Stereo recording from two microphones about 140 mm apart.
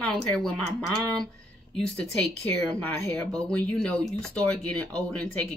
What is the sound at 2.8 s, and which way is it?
Speech, 15° left (ahead or behind).